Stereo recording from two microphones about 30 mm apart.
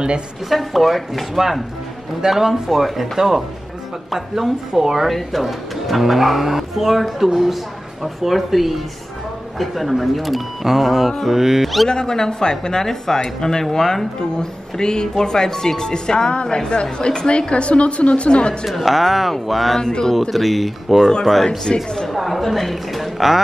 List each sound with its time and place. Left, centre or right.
0.5 s speech: centre
11.9 s speech: left
14.3 s a woman's voice: left
18.7 s speech: centre
19.8 s speech: left
20.2 s speech: centre
21.7 s speech: left
22.1 s speech: centre